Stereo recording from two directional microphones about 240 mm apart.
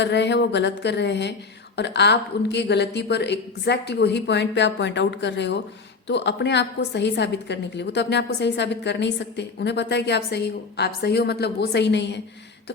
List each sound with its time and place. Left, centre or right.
0.0 s a woman's voice: left